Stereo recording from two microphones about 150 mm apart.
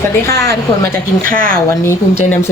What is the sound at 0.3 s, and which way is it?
Speech, 20° left (ahead or behind).